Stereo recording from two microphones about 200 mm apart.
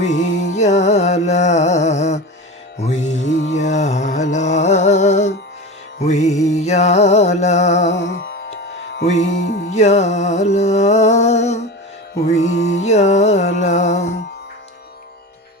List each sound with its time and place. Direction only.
0.0 s music: 35° left (ahead or behind)
7.9 s music: 70° left (ahead or behind)
9.0 s music: 35° left (ahead or behind)